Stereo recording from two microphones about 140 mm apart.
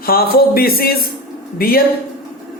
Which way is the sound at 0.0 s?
90° left.